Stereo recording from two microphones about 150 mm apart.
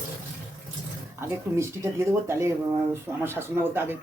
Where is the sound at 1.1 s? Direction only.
15° right (ahead or behind).